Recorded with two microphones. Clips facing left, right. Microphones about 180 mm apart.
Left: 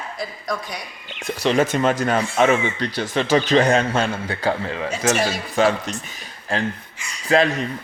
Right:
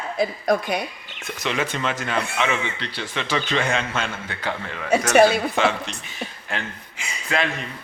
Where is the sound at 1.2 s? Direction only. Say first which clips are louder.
Left 7 dB; 35° left (ahead or behind).